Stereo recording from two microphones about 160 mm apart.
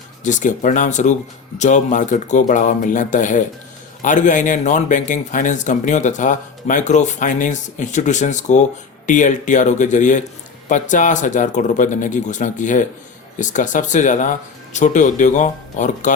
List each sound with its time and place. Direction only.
0.3 s speech: 50° left (ahead or behind)